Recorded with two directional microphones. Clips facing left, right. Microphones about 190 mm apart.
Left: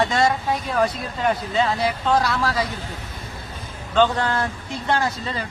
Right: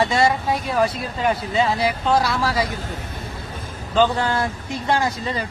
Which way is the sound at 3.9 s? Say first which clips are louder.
Right 1 dB; 5° right (ahead or behind).